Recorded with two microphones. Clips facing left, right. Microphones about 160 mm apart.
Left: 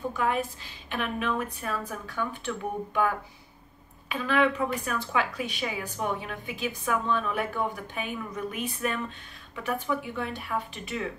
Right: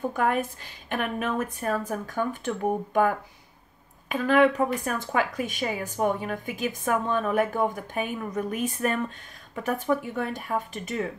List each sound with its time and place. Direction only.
0.1 s a woman's voice: 50° right (ahead or behind)